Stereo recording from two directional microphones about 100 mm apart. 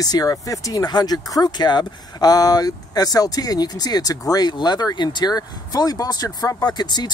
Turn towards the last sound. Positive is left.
turn(degrees=45)  # may be behind; listen again after turning